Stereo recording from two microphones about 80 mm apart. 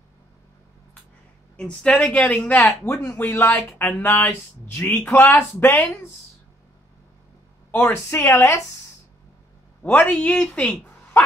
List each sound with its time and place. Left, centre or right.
1.6 s speech: centre
2.8 s a man's voice: left
4.8 s speech: centre
7.7 s speech: left
9.8 s speech: centre